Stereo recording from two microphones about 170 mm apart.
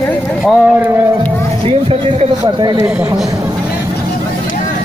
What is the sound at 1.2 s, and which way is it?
Music, 35° right (ahead or behind).